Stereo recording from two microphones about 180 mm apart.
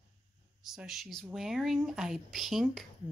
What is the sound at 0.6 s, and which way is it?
Speech, centre (ahead or behind).